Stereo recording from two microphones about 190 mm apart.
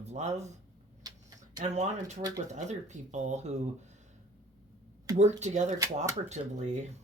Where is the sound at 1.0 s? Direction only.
20° right (ahead or behind).